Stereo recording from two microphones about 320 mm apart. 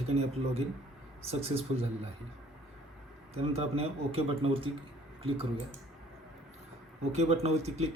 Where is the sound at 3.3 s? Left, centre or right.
Centre.